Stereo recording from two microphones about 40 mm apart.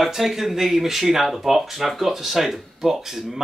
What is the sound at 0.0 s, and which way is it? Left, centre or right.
Speech, centre.